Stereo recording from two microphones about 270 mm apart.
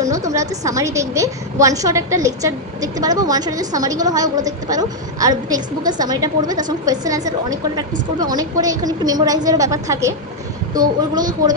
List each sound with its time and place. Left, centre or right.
0.1 s a woman's voice: centre